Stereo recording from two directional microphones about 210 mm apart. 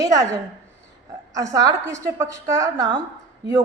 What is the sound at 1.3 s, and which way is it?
A woman's voice, 15° right (ahead or behind).